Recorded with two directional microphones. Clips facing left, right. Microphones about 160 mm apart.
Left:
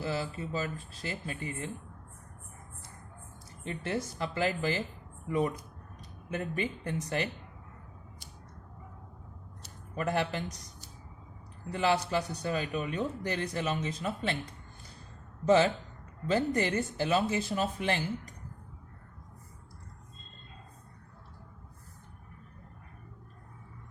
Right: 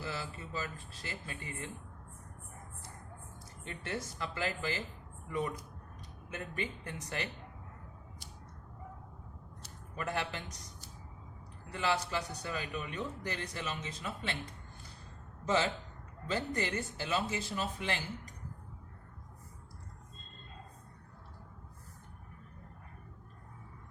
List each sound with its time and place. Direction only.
0.0 s speech: 35° left (ahead or behind)
3.6 s speech: 30° left (ahead or behind)
10.0 s speech: 40° left (ahead or behind)
11.7 s speech: 35° left (ahead or behind)
15.4 s speech: 45° left (ahead or behind)